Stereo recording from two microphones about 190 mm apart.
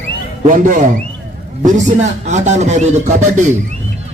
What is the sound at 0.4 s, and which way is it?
A man's voice, 45° right (ahead or behind).